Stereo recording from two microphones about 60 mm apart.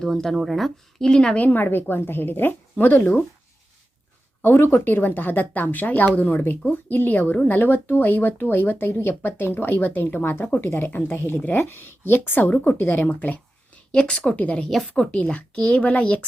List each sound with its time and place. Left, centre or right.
0.0 s speech: centre
1.0 s speech: centre
1.4 s a woman's voice: left
4.4 s a woman's voice: left
13.9 s a woman's voice: centre